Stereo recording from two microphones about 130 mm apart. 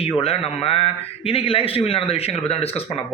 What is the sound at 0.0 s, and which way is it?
A man's voice, 50° left (ahead or behind).